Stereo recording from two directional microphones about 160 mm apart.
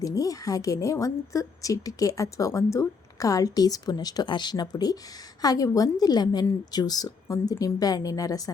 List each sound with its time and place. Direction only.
0.0 s a woman's voice: 20° left (ahead or behind)